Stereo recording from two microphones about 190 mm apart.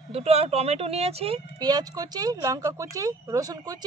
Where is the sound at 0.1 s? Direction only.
30° right (ahead or behind).